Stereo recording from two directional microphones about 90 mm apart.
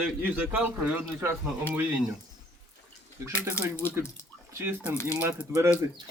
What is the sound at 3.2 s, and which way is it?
Speech, 35° right (ahead or behind).